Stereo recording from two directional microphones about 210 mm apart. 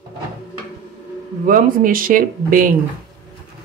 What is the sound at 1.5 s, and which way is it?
Speech, 40° right (ahead or behind).